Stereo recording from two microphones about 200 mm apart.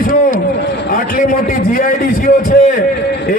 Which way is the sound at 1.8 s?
40° left (ahead or behind).